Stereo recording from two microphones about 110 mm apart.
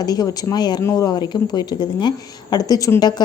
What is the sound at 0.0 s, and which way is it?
A woman's voice, 35° left (ahead or behind).